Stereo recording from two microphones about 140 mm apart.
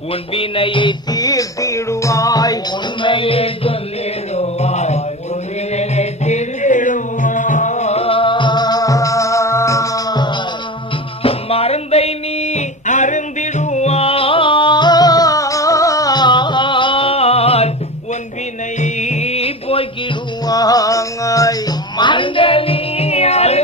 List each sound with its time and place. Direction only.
0.3 s music: 40° left (ahead or behind)
11.2 s music: 45° left (ahead or behind)
18.8 s music: 55° left (ahead or behind)
20.4 s music: 25° left (ahead or behind); by 23.6 s 50° left (ahead or behind)